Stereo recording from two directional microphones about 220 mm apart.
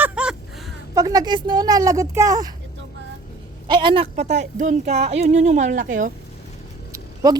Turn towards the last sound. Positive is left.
turn(degrees=-15)  # may be behind; listen again after turning